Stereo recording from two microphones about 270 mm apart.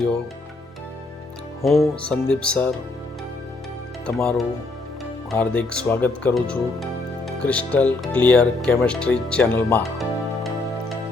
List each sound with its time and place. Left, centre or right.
1.8 s speech: centre
4.0 s speech: centre